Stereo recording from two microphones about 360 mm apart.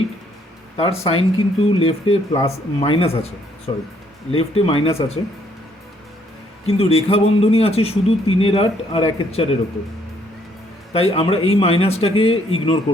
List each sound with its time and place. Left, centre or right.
0.8 s a man's voice: centre
4.3 s a man's voice: centre
6.7 s a man's voice: centre
10.9 s a man's voice: centre